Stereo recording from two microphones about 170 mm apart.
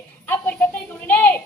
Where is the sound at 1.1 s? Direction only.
10° left (ahead or behind).